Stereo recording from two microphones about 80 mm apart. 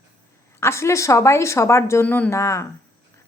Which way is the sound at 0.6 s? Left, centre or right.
Left.